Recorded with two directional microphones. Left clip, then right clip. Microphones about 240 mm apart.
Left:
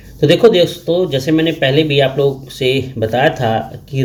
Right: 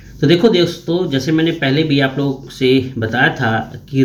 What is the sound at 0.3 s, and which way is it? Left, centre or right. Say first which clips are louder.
Speech: left 3 dB; centre.